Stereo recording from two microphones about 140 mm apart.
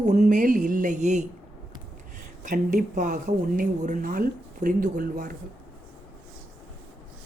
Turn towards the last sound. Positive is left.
turn(degrees=-70)  # may be behind; listen again after turning